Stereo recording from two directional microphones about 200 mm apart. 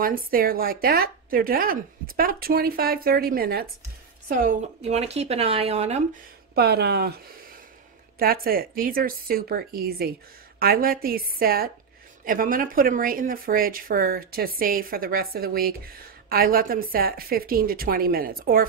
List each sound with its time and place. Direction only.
0.0 s speech: 45° right (ahead or behind)
6.5 s speech: 50° right (ahead or behind)
8.2 s speech: 45° right (ahead or behind)